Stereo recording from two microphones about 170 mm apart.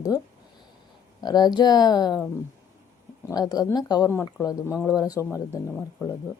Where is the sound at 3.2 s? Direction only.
20° left (ahead or behind).